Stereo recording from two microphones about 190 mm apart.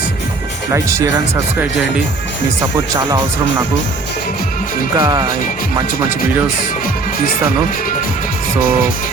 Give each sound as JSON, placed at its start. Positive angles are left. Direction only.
{"t": 0.7, "sound": "speech", "side_deg": -15}
{"t": 4.9, "sound": "speech", "side_deg": -20}